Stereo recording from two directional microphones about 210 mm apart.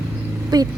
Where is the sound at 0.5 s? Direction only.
20° right (ahead or behind).